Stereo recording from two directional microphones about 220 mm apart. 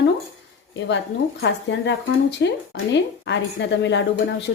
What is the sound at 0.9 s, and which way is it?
Speech, 55° left (ahead or behind).